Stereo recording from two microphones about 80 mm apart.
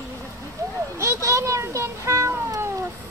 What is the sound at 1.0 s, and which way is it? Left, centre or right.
Cat, right.